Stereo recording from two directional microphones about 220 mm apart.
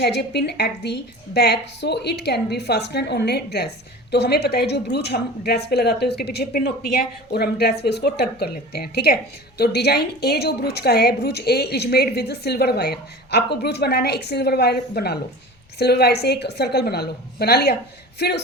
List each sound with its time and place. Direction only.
0.0 s a woman's voice: 50° left (ahead or behind)